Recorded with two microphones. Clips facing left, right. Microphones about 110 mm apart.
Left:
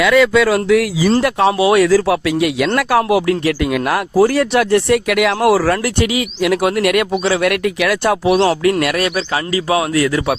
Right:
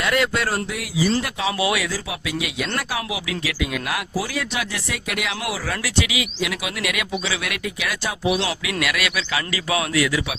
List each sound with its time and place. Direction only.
0.5 s speech: 80° left
1.2 s speech: 65° left (ahead or behind)
1.5 s speech: 30° left (ahead or behind)
1.8 s speech: 70° left (ahead or behind)
5.8 s speech: 45° left (ahead or behind)